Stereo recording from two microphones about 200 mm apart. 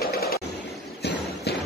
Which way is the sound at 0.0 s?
50° left (ahead or behind).